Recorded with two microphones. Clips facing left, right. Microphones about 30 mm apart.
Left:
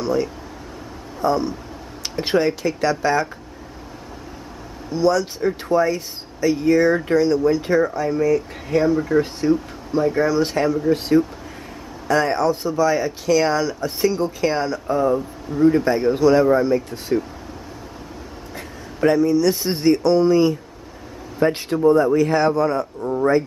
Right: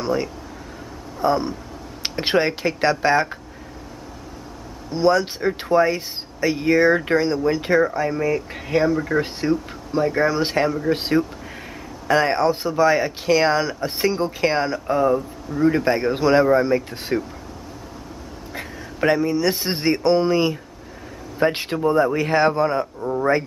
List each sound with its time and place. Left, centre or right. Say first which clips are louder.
0.0 s speech: left 2 dB; centre
4.9 s speech: even; right
18.9 s speech: left 3 dB; right
23.0 s speech: left 2 dB; centre